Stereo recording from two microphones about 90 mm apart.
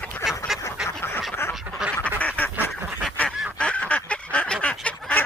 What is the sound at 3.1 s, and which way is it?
Goose, 15° left (ahead or behind).